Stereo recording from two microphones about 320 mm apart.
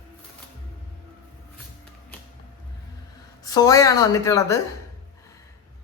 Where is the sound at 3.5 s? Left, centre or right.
Centre.